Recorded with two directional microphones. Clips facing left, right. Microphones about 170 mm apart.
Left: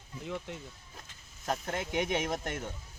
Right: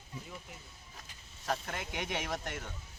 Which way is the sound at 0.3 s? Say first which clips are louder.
Left 10 dB; 90° left.